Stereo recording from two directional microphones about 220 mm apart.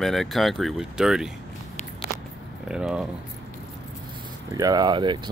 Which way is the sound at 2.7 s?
5° right (ahead or behind).